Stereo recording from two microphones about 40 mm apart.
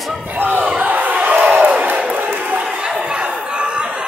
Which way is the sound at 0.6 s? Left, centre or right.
Right.